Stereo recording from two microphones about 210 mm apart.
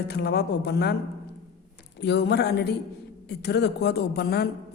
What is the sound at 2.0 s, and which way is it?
A man's voice, 55° left (ahead or behind).